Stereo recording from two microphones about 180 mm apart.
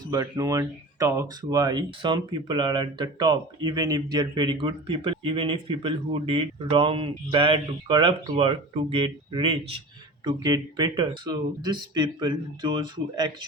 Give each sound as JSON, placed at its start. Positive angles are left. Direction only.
{"t": 0.0, "sound": "speech", "side_deg": -20}